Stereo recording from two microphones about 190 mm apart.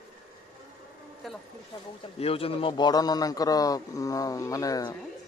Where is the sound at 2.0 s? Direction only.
30° left (ahead or behind).